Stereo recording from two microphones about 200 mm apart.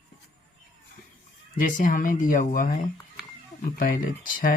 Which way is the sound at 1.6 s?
40° left (ahead or behind).